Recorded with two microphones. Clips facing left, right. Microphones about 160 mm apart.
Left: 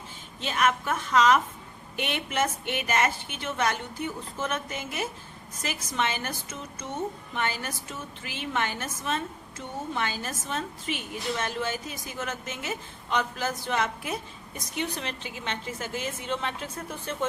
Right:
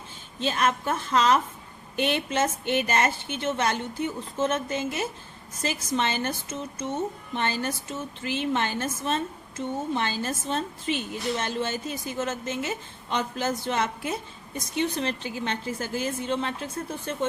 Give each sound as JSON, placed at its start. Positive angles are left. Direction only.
{"t": 0.3, "sound": "a woman's voice", "side_deg": -30}